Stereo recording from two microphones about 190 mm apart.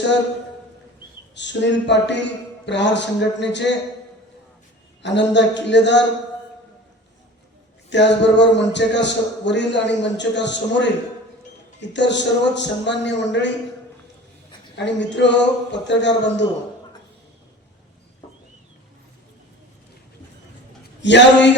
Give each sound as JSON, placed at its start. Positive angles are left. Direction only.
{"t": 1.4, "sound": "speech", "side_deg": 70}
{"t": 5.0, "sound": "speech", "side_deg": 65}
{"t": 7.9, "sound": "speech", "side_deg": 70}
{"t": 14.8, "sound": "speech", "side_deg": 70}
{"t": 21.0, "sound": "speech", "side_deg": 70}